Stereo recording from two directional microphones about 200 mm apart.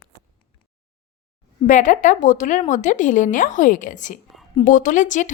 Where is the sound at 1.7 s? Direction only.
40° left (ahead or behind).